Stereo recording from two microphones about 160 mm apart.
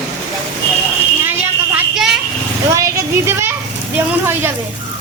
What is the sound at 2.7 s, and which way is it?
A child's voice, 20° right (ahead or behind).